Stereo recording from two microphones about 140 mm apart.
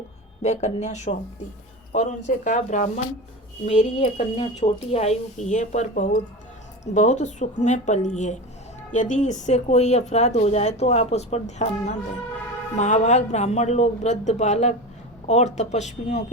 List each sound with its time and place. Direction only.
0.4 s speech: 55° left (ahead or behind)